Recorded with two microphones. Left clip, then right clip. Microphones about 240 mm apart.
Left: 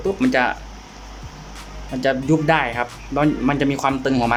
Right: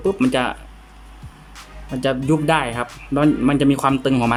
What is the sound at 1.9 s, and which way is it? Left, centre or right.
Speech, centre.